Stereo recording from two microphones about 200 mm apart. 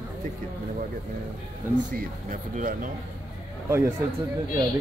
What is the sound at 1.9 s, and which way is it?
Speech, 45° right (ahead or behind).